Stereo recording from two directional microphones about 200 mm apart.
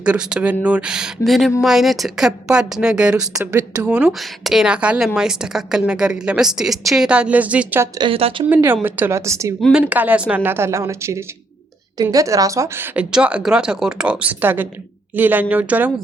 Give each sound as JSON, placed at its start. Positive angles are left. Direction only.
{"t": 0.0, "sound": "a woman's voice", "side_deg": -5}
{"t": 3.8, "sound": "a woman's voice", "side_deg": -5}
{"t": 7.9, "sound": "a woman's voice", "side_deg": -25}
{"t": 8.4, "sound": "a woman's voice", "side_deg": -10}
{"t": 9.6, "sound": "a woman's voice", "side_deg": 0}